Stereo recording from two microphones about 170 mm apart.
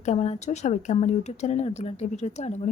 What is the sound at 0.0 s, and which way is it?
Speech, 40° left (ahead or behind).